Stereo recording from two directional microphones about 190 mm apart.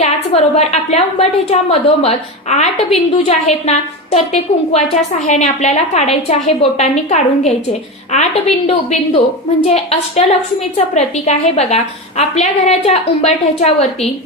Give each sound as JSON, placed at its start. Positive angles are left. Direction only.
{"t": 0.0, "sound": "a woman's voice", "side_deg": 35}